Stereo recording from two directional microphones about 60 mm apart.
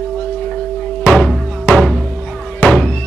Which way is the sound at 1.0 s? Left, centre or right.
Left.